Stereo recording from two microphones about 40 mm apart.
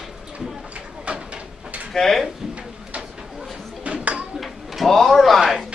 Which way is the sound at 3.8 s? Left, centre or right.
Right.